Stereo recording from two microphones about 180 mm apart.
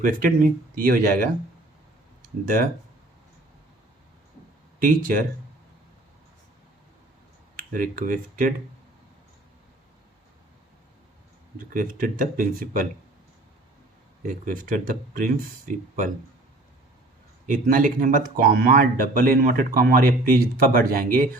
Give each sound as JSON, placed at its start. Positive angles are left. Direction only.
{"t": 0.0, "sound": "speech", "side_deg": -50}
{"t": 4.8, "sound": "speech", "side_deg": -50}
{"t": 7.7, "sound": "speech", "side_deg": -50}
{"t": 11.7, "sound": "speech", "side_deg": -50}
{"t": 14.2, "sound": "speech", "side_deg": -45}
{"t": 17.4, "sound": "speech", "side_deg": -50}